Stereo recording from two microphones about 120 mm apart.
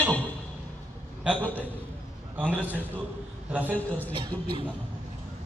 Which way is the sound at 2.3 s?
15° right (ahead or behind).